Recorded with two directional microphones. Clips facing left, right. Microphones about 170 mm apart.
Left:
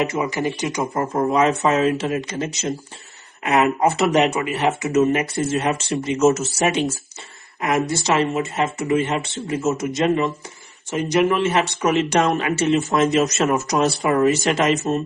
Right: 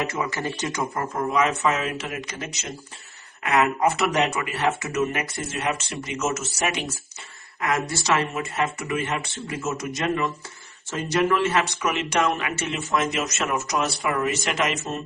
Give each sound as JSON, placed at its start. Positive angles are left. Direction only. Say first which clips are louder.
{"t": 0.0, "sound": "speech", "louder": "left 6 dB", "side_deg": 20}
{"t": 0.9, "sound": "speech", "louder": "left 6 dB", "side_deg": 35}
{"t": 11.8, "sound": "speech", "louder": "left 6 dB", "side_deg": 35}